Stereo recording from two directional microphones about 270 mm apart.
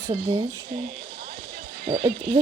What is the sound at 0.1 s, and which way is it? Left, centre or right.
Speech, right.